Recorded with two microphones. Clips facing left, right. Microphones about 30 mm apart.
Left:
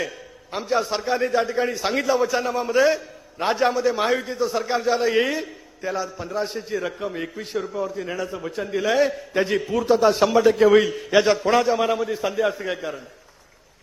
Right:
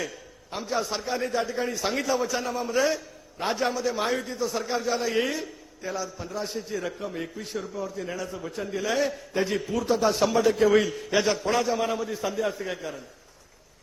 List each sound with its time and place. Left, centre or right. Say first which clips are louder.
0.5 s a man's voice: left 6 dB; left
9.6 s a man's voice: left 8 dB; centre